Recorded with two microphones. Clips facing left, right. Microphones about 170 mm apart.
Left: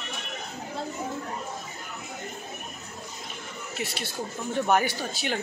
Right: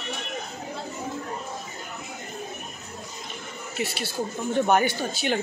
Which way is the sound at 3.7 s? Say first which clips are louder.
Right 4 dB; centre (ahead or behind).